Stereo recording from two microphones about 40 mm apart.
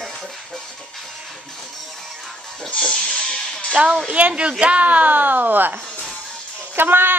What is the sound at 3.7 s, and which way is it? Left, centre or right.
A woman's voice, right.